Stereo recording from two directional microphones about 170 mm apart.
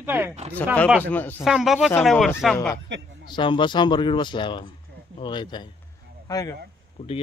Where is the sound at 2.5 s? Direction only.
15° left (ahead or behind).